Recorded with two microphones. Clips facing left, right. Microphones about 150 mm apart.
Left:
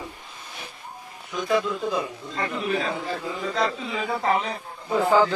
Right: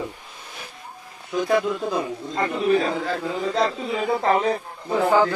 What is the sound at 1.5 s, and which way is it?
A man's voice, 45° right (ahead or behind).